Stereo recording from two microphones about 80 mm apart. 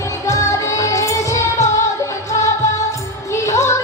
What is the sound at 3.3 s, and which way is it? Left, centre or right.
Music, left.